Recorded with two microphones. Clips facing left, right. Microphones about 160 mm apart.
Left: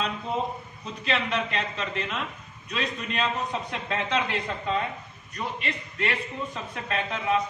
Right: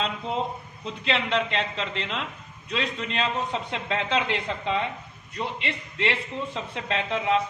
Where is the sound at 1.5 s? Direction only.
25° right (ahead or behind).